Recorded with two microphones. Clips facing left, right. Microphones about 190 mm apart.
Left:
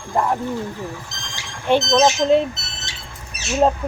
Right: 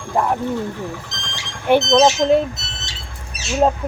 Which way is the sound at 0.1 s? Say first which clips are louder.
Right 1 dB; 5° right (ahead or behind).